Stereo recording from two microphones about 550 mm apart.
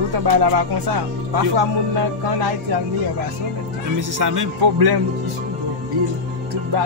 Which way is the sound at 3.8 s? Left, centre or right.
Right.